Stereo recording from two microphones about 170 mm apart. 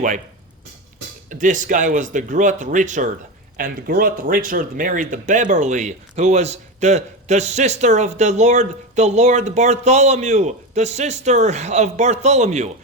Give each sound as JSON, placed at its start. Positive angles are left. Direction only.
{"t": 1.3, "sound": "speech", "side_deg": -50}
{"t": 3.6, "sound": "speech", "side_deg": -60}